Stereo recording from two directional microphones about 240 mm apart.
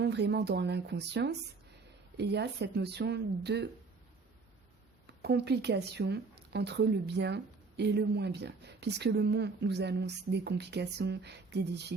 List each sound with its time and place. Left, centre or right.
0.0 s speech: right
5.2 s speech: right